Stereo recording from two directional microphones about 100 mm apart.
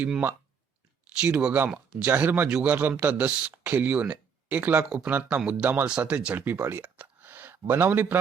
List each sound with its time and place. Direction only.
0.0 s speech: 15° right (ahead or behind)
4.9 s speech: 5° right (ahead or behind)
6.7 s a sound: 20° right (ahead or behind)
7.7 s a man's voice: 20° right (ahead or behind)